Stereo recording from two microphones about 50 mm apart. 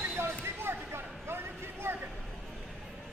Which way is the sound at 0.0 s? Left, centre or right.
Right.